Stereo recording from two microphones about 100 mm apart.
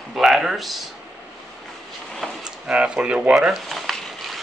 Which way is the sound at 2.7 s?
10° right (ahead or behind).